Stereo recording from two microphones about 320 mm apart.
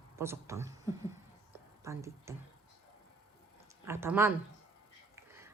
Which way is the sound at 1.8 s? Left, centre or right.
Centre.